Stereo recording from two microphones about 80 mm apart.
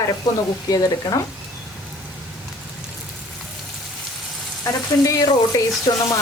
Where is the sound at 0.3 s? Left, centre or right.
Left.